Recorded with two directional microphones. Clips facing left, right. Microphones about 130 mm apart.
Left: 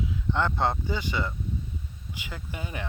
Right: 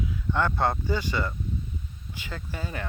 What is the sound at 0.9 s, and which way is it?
Speech, 15° left (ahead or behind).